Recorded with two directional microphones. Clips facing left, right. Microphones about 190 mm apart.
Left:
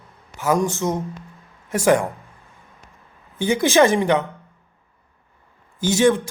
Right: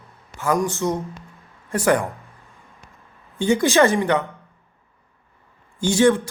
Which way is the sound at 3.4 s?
15° left (ahead or behind).